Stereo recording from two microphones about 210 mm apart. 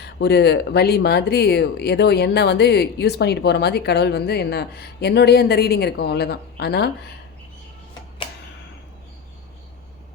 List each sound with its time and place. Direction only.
0.0 s speech: 50° left (ahead or behind)